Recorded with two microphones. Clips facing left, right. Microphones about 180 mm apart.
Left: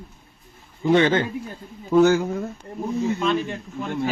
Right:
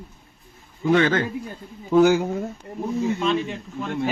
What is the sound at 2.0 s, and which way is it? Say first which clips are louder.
Speech: even; 20° right (ahead or behind).